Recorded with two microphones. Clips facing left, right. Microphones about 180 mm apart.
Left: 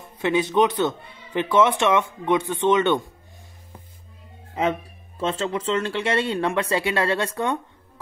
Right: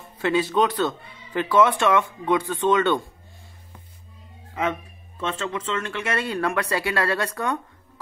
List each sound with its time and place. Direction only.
0.2 s speech: 20° left (ahead or behind)
4.6 s speech: 35° left (ahead or behind)